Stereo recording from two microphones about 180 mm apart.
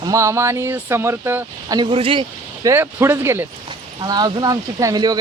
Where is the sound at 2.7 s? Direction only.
15° right (ahead or behind).